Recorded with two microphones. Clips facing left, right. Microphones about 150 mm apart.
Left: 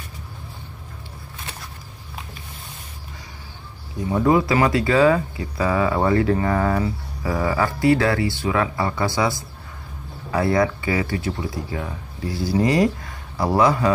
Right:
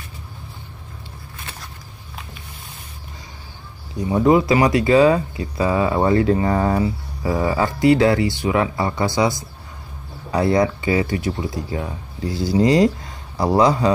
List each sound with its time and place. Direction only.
4.1 s speech: 20° right (ahead or behind)
10.3 s speech: 20° right (ahead or behind)